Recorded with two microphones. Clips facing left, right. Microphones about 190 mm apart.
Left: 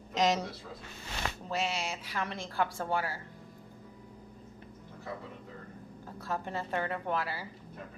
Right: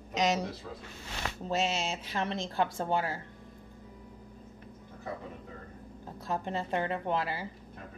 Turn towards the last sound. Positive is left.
turn(degrees=-20)  # may be behind; listen again after turning